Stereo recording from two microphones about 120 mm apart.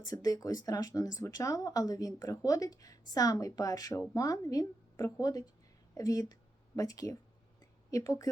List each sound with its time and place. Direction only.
0.0 s a woman's voice: 30° left (ahead or behind)